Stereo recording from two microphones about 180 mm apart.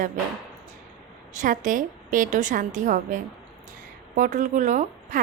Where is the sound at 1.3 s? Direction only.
45° right (ahead or behind).